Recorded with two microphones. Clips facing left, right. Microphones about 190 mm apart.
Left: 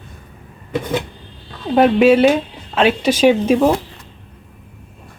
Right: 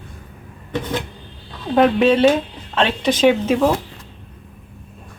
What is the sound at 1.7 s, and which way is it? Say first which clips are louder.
Speech: left 3 dB; 20° left (ahead or behind).